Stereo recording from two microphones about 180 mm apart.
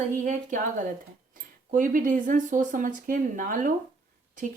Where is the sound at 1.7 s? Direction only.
45° right (ahead or behind).